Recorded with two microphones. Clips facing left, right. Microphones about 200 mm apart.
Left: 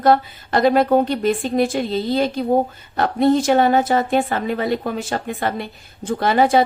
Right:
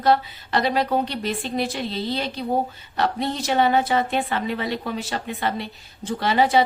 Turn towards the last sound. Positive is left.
turn(degrees=50)  # may be behind; listen again after turning